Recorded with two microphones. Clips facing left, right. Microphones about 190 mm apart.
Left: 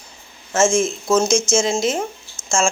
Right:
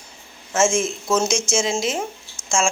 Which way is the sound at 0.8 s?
Centre (ahead or behind).